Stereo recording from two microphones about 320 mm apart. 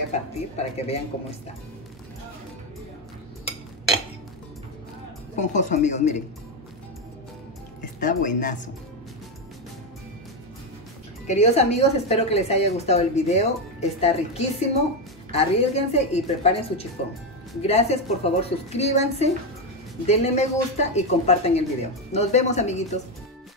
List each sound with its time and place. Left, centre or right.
0.1 s a woman's voice: centre
5.3 s a woman's voice: left
8.0 s a woman's voice: left
11.2 s a woman's voice: centre